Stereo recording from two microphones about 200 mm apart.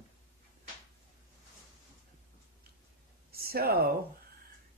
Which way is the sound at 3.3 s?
50° right (ahead or behind).